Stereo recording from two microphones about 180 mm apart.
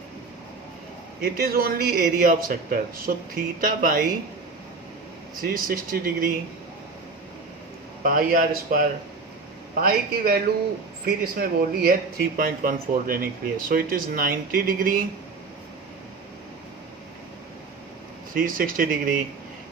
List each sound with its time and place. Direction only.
1.2 s a man's voice: 55° right (ahead or behind)
5.4 s a man's voice: 50° right (ahead or behind)
8.0 s a man's voice: 50° right (ahead or behind)
18.3 s a man's voice: 50° right (ahead or behind)